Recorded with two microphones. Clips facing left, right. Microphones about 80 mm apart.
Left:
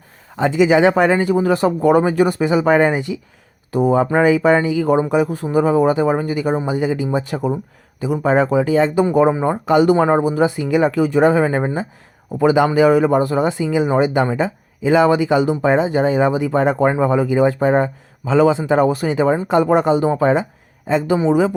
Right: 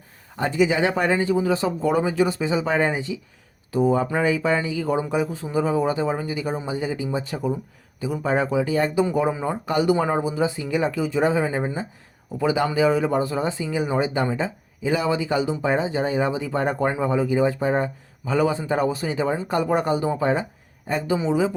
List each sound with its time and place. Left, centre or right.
0.3 s a man's voice: left
9.4 s a man's voice: left
17.0 s a man's voice: left
19.5 s speech: left
20.1 s a man's voice: left
20.8 s speech: left
21.2 s speech: left